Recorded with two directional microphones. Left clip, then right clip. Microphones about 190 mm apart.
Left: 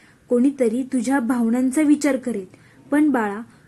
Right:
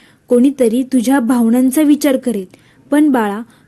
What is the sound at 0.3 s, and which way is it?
A woman's voice, 40° right (ahead or behind).